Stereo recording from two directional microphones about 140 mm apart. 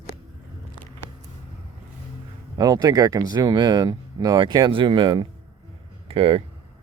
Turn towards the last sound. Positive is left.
turn(degrees=-40)  # may be behind; listen again after turning